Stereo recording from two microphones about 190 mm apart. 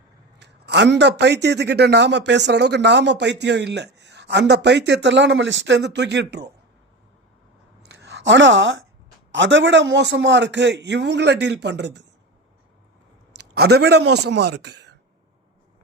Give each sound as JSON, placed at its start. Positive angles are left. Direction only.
{"t": 0.3, "sound": "a man's voice", "side_deg": -60}
{"t": 7.9, "sound": "a sound", "side_deg": -65}
{"t": 9.3, "sound": "a man's voice", "side_deg": -75}
{"t": 13.3, "sound": "a man's voice", "side_deg": -60}